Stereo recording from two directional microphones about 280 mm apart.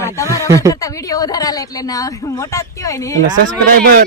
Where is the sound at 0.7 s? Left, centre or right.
Centre.